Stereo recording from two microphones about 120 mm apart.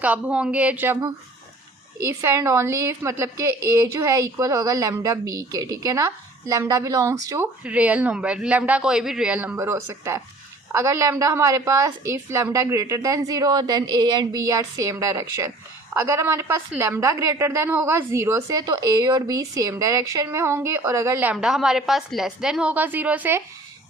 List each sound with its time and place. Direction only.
0.0 s speech: 10° right (ahead or behind)
2.2 s a woman's voice: 20° right (ahead or behind)
7.6 s a woman's voice: 10° right (ahead or behind)
21.3 s a woman's voice: 5° right (ahead or behind)